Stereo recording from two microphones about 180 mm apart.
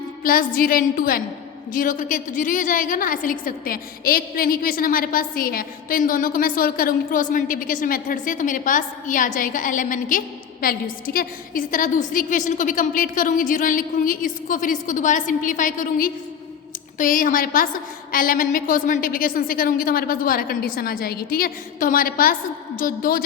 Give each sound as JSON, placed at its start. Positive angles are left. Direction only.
{"t": 0.2, "sound": "a woman's voice", "side_deg": 50}